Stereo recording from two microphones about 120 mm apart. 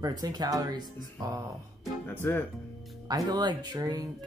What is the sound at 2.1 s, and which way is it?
Speech, 20° left (ahead or behind).